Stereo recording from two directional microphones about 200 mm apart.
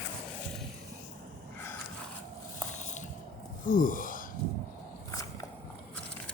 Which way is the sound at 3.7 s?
40° left (ahead or behind).